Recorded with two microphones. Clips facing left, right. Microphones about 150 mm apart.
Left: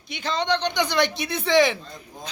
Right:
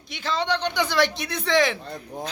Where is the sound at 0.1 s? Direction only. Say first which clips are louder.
Left 1 dB; centre (ahead or behind).